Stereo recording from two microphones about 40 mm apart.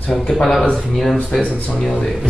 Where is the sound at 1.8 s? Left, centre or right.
Centre.